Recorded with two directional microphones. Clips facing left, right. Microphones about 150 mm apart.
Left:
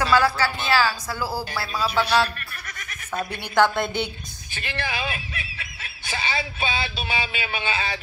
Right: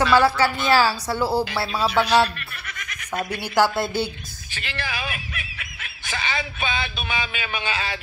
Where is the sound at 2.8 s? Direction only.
90° right.